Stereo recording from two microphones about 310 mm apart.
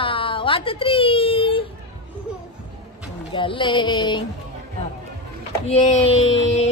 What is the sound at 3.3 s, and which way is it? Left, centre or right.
Speech, centre.